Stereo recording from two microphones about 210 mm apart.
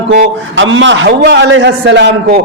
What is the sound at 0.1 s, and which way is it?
A man's voice, 55° right (ahead or behind).